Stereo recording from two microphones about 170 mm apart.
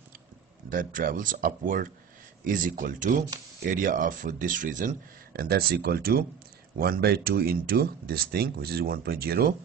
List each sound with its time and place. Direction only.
0.7 s speech: 55° right (ahead or behind)